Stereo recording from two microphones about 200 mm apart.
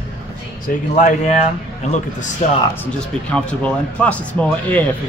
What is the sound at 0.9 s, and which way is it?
Speech, 40° left (ahead or behind).